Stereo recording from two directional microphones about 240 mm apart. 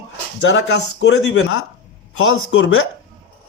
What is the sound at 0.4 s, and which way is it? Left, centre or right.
A man's voice, left.